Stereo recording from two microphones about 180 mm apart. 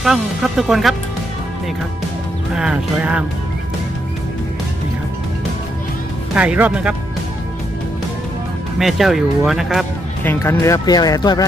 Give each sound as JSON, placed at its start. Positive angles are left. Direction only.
{"t": 0.0, "sound": "speech", "side_deg": 0}
{"t": 2.6, "sound": "speech", "side_deg": -5}
{"t": 6.3, "sound": "speech", "side_deg": -5}
{"t": 8.8, "sound": "speech", "side_deg": 0}
{"t": 10.2, "sound": "speech", "side_deg": 15}